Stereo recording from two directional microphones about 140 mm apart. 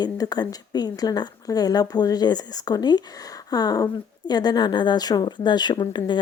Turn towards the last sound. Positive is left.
turn(degrees=30)  # may be behind; listen again after turning